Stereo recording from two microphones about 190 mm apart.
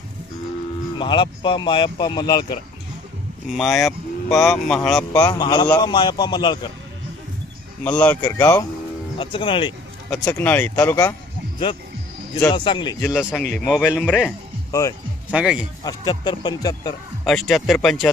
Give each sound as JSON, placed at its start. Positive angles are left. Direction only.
{"t": 0.9, "sound": "speech", "side_deg": 25}
{"t": 3.5, "sound": "speech", "side_deg": 0}
{"t": 5.2, "sound": "speech", "side_deg": 20}
{"t": 7.9, "sound": "speech", "side_deg": 10}
{"t": 10.1, "sound": "speech", "side_deg": 15}
{"t": 12.5, "sound": "speech", "side_deg": 25}
{"t": 13.1, "sound": "speech", "side_deg": 0}
{"t": 14.1, "sound": "speech", "side_deg": -5}
{"t": 14.7, "sound": "speech", "side_deg": 15}
{"t": 15.3, "sound": "speech", "side_deg": -5}
{"t": 15.8, "sound": "speech", "side_deg": 20}
{"t": 17.2, "sound": "speech", "side_deg": 0}